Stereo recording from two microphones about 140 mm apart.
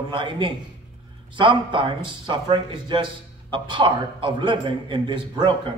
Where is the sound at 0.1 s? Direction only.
35° right (ahead or behind).